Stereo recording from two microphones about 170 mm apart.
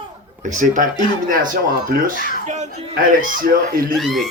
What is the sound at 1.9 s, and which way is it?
Speech, 55° right (ahead or behind).